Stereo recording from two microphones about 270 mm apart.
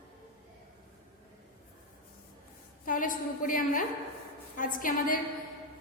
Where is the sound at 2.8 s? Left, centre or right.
Left.